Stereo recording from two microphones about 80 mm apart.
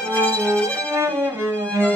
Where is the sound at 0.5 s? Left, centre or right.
Centre.